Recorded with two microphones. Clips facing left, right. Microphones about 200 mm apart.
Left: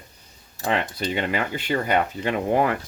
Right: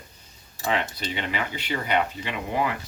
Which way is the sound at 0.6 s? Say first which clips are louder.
Left 2 dB; 50° left (ahead or behind).